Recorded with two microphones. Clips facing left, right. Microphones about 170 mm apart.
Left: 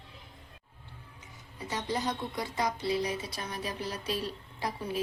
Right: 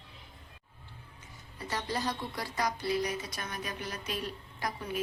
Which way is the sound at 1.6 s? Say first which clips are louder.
Left 1 dB; 20° left (ahead or behind).